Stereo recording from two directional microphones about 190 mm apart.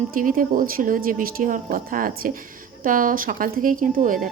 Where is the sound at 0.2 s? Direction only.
45° right (ahead or behind).